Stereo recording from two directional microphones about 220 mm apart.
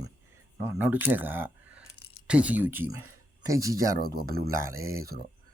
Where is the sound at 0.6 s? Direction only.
10° right (ahead or behind).